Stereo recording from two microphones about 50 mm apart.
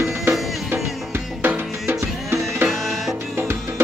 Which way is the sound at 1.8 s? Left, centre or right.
Right.